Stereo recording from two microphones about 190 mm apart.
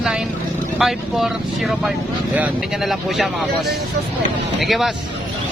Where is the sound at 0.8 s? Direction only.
Centre (ahead or behind).